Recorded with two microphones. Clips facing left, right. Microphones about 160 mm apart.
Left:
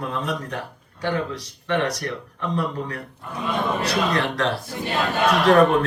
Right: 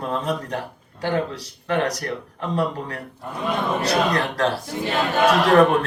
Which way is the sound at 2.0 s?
35° right (ahead or behind).